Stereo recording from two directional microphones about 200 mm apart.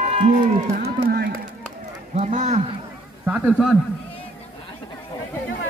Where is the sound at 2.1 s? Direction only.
35° right (ahead or behind).